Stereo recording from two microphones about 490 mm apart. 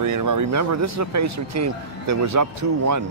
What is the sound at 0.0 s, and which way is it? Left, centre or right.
Speech, right.